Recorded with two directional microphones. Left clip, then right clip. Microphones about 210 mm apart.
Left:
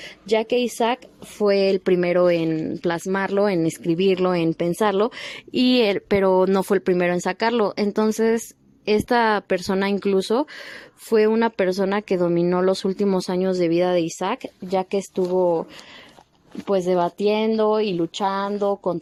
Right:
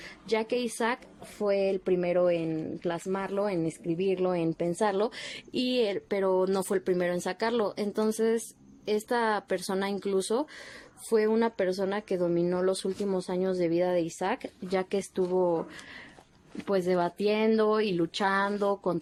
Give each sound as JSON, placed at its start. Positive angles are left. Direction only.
{"t": 0.0, "sound": "a woman's voice", "side_deg": 35}
{"t": 1.4, "sound": "speech", "side_deg": 45}
{"t": 16.6, "sound": "speech", "side_deg": 25}